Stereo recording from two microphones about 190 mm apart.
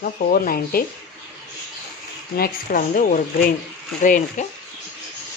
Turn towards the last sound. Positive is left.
turn(degrees=45)  # may be behind; listen again after turning